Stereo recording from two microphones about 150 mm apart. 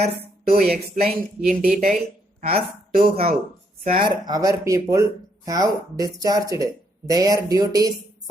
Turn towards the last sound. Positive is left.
turn(degrees=-25)  # may be behind; listen again after turning